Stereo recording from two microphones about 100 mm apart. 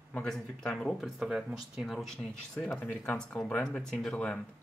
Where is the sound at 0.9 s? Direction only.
5° right (ahead or behind).